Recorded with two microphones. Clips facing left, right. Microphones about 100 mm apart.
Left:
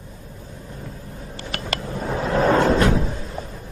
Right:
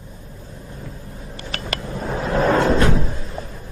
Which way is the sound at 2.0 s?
5° left (ahead or behind).